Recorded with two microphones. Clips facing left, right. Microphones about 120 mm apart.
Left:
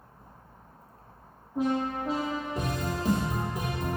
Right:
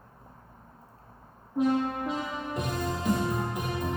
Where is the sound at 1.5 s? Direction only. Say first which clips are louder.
Right 2 dB; 35° left (ahead or behind).